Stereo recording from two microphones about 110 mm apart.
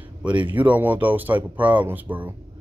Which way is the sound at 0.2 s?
10° right (ahead or behind).